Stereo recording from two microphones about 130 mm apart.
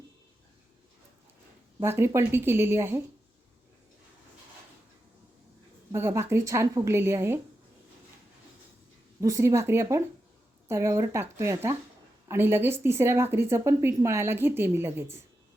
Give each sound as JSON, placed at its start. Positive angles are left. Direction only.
{"t": 1.8, "sound": "a woman's voice", "side_deg": -20}
{"t": 5.9, "sound": "a woman's voice", "side_deg": -20}
{"t": 9.2, "sound": "a woman's voice", "side_deg": -25}